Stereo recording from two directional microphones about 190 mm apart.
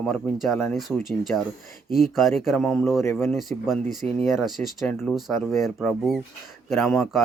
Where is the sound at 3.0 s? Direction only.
15° left (ahead or behind).